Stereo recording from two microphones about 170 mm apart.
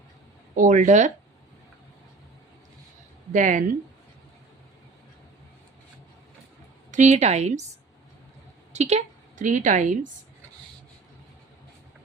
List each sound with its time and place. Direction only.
0.5 s speech: 50° right (ahead or behind)
3.3 s speech: 50° right (ahead or behind)
6.9 s a woman's voice: 45° right (ahead or behind)
8.7 s a woman's voice: 40° right (ahead or behind)